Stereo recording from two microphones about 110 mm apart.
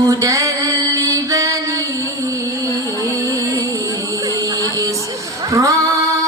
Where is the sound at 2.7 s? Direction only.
30° right (ahead or behind).